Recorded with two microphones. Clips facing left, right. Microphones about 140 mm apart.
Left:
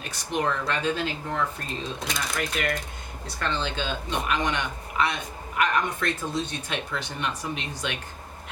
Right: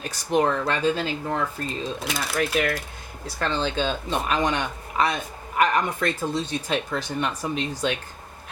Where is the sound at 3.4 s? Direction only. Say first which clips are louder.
Right 4 dB; 35° right (ahead or behind).